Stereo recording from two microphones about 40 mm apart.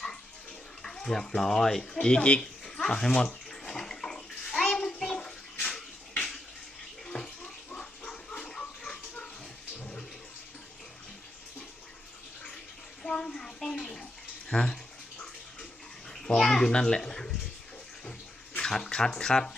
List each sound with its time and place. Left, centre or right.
0.8 s bathtub: centre
1.4 s speech: centre
2.6 s speech: centre
3.7 s bathtub: centre
7.1 s bathtub: centre
13.0 s bathtub: centre
16.0 s bathtub: centre
18.6 s speech: centre